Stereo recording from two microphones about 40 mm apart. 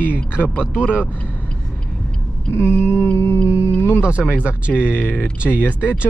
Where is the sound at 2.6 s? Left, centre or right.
Left.